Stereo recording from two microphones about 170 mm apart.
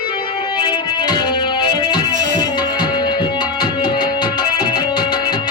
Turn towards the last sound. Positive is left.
turn(degrees=25)  # may be behind; listen again after turning